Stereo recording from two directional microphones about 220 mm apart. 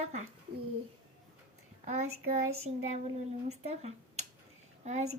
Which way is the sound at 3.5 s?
30° right (ahead or behind).